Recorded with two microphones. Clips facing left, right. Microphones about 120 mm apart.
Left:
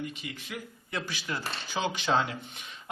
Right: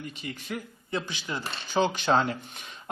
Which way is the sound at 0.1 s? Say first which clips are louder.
Right 4 dB; 40° right (ahead or behind).